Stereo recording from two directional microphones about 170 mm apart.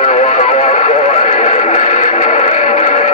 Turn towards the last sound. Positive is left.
turn(degrees=45)  # may be behind; listen again after turning